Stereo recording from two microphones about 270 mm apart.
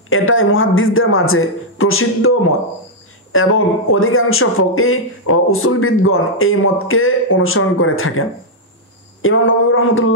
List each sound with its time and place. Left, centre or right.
0.1 s speech: left